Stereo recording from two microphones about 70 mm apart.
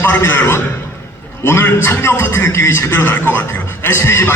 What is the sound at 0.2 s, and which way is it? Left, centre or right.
Speech, left.